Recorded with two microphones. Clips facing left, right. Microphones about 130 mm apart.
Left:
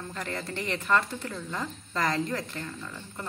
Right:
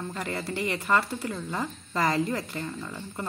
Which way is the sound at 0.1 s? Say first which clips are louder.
Right 3 dB; 10° right (ahead or behind).